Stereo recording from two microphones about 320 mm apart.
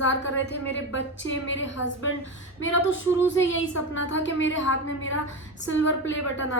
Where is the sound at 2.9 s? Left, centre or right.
Left.